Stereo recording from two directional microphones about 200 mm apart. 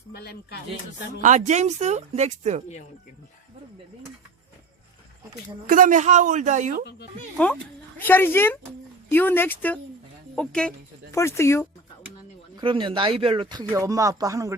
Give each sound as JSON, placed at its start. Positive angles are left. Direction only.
{"t": 0.1, "sound": "music", "side_deg": 50}
{"t": 1.2, "sound": "speech", "side_deg": -35}
{"t": 5.6, "sound": "speech", "side_deg": -40}
{"t": 7.4, "sound": "speech", "side_deg": 5}
{"t": 12.5, "sound": "speech", "side_deg": -25}